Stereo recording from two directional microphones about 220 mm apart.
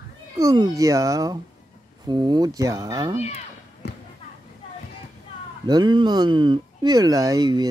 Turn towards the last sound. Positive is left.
turn(degrees=-20)  # may be behind; listen again after turning